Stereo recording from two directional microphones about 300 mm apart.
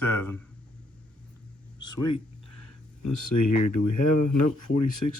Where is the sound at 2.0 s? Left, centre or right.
Left.